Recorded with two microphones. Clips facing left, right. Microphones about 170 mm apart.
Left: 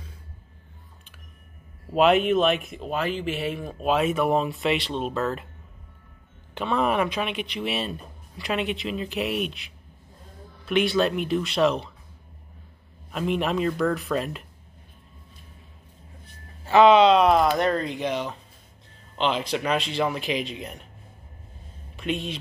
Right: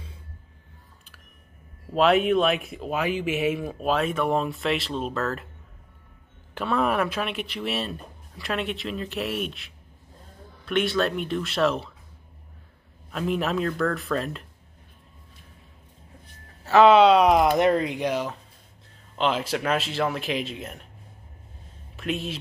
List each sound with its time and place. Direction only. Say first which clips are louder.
1.9 s speech: left 1 dB; centre (ahead or behind)
6.5 s speech: even; centre (ahead or behind)
13.1 s speech: left 1 dB; centre (ahead or behind)
16.6 s speech: even; 5° right (ahead or behind)
21.9 s speech: left 1 dB; centre (ahead or behind)